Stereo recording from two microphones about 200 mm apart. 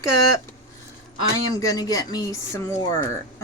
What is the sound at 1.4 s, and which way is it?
Speech, 20° left (ahead or behind).